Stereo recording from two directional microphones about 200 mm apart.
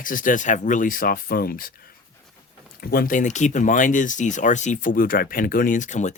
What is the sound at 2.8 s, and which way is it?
Speech, 50° left (ahead or behind).